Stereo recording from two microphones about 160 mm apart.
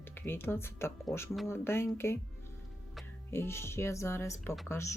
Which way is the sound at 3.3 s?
15° left (ahead or behind).